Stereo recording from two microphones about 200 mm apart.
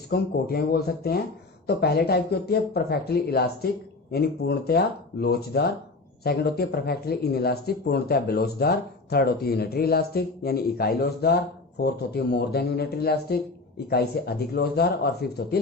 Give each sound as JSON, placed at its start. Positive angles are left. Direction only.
{"t": 0.1, "sound": "speech", "side_deg": 50}